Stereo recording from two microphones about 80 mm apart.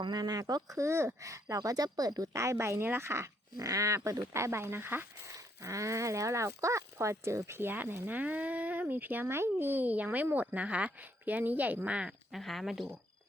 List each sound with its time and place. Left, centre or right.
0.0 s speech: right; by 12.1 s centre
12.3 s speech: centre